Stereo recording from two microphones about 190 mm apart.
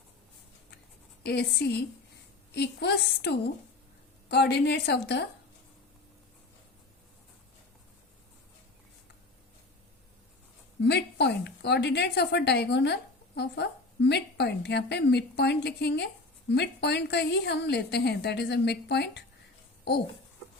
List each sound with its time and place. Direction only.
1.2 s a woman's voice: 60° left (ahead or behind)
10.8 s a woman's voice: 60° left (ahead or behind)